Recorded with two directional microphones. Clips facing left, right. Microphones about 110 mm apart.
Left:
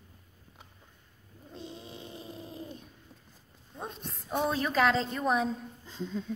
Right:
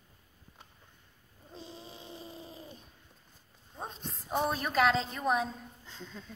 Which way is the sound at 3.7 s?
20° right (ahead or behind).